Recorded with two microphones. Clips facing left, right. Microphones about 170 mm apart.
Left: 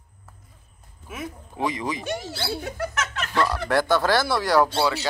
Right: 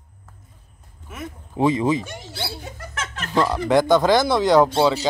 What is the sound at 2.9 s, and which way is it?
Music, 30° right (ahead or behind).